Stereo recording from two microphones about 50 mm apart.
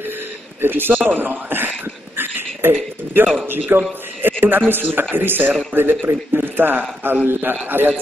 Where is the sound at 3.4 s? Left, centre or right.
Right.